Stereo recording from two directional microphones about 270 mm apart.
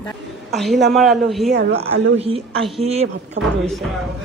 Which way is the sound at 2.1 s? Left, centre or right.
Right.